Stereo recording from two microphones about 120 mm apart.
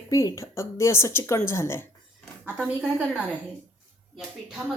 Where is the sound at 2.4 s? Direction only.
10° right (ahead or behind).